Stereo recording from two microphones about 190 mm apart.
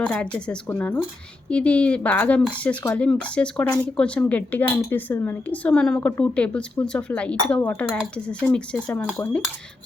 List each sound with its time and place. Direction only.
0.0 s speech: 5° left (ahead or behind)